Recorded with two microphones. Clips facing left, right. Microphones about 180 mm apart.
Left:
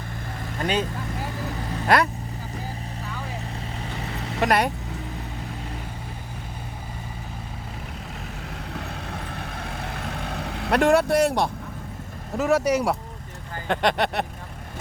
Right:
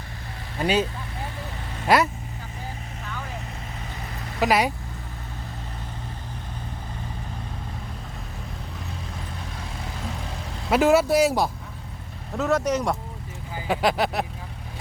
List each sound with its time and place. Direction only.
0.6 s speech: 5° right (ahead or behind)
1.9 s speech: 5° right (ahead or behind)
4.4 s speech: centre (ahead or behind)
8.7 s vehicle: 70° left (ahead or behind)
10.7 s speech: 5° right (ahead or behind)
12.4 s speech: 10° left (ahead or behind)
13.6 s speech: 5° right (ahead or behind)